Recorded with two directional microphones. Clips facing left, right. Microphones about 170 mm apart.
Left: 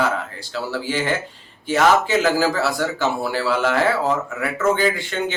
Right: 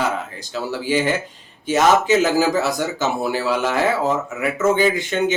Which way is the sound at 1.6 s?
20° right (ahead or behind).